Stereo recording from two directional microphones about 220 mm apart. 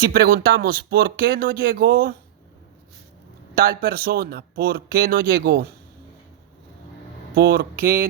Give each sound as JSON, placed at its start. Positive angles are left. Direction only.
{"t": 0.0, "sound": "speech", "side_deg": -45}
{"t": 3.5, "sound": "speech", "side_deg": -45}
{"t": 7.3, "sound": "speech", "side_deg": -45}